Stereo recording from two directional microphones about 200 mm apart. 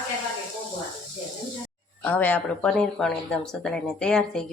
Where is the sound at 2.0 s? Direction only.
10° left (ahead or behind).